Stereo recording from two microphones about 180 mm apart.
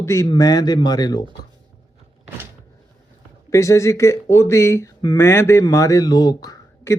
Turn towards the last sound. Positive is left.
turn(degrees=20)  # may be behind; listen again after turning